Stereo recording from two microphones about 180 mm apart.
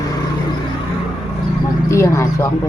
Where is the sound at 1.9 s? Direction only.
15° left (ahead or behind).